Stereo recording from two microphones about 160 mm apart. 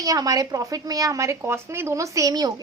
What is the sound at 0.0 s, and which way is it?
Speech, 20° right (ahead or behind).